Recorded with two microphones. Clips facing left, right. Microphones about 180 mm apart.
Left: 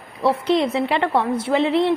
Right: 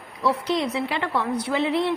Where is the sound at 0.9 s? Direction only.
55° left (ahead or behind).